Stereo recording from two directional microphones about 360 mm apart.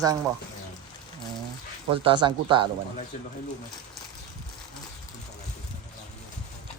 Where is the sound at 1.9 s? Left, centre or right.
Centre.